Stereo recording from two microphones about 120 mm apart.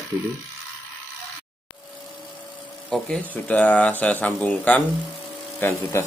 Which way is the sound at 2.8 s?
10° left (ahead or behind).